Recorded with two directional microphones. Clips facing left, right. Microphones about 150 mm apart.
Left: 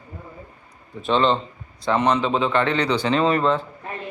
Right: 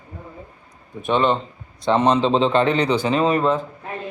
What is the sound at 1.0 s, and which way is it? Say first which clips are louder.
A man's voice: even; 15° right (ahead or behind).